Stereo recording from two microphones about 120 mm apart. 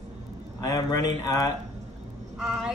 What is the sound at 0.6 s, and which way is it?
Speech, 30° left (ahead or behind).